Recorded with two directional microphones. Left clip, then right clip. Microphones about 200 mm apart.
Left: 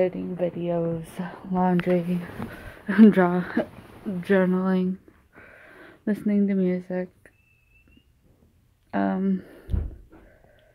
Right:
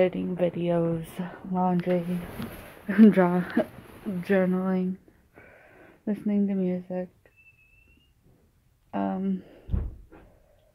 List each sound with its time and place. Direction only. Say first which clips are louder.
0.0 s speech: even; 5° right (ahead or behind)
1.3 s speech: left 3 dB; 15° left (ahead or behind)
4.2 s speech: left 3 dB; 10° left (ahead or behind)
5.3 s a sound: left 4 dB; 10° left (ahead or behind)
8.9 s speech: left 4 dB; 20° left (ahead or behind)